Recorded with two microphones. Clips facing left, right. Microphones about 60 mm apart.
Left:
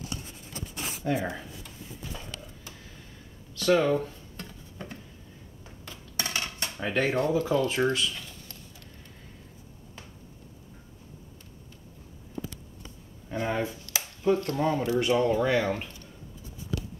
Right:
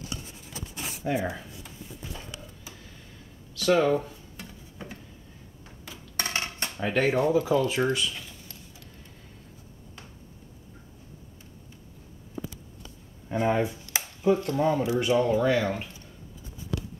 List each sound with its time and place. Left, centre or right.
1.0 s speech: centre
3.5 s a sound: centre
6.1 s a sound: right
6.8 s speech: centre
7.1 s speech: centre
13.3 s speech: centre